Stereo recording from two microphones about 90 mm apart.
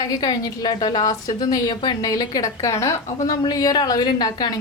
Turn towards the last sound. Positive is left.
turn(degrees=50)  # may be behind; listen again after turning